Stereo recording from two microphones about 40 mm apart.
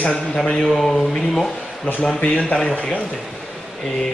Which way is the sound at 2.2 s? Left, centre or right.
Left.